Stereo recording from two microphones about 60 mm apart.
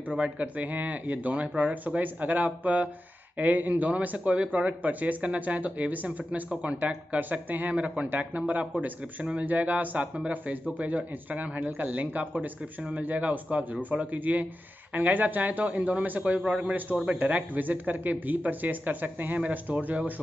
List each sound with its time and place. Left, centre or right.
0.1 s a man's voice: right